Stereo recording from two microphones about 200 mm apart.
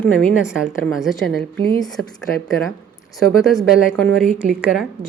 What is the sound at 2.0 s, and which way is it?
Speech, 90° right.